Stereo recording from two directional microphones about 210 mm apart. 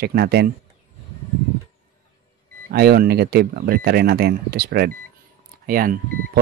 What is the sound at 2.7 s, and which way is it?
Speech, 50° right (ahead or behind).